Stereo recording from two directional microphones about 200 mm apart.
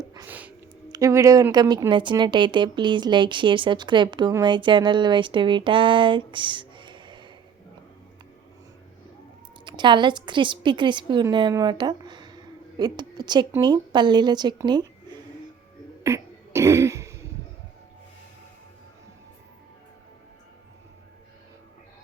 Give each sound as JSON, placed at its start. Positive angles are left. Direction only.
{"t": 0.0, "sound": "a sound", "side_deg": -15}
{"t": 0.9, "sound": "speech", "side_deg": -15}
{"t": 9.6, "sound": "a woman's voice", "side_deg": -25}
{"t": 16.0, "sound": "throat clearing", "side_deg": -15}